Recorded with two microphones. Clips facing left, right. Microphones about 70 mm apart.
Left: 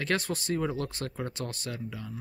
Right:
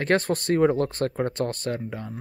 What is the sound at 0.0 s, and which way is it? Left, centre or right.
Speech, right.